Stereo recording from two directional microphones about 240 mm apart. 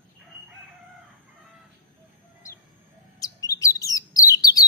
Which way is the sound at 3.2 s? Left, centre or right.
Centre.